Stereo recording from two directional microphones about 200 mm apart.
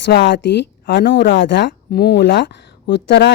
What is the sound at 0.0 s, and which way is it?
Speech, 60° left (ahead or behind).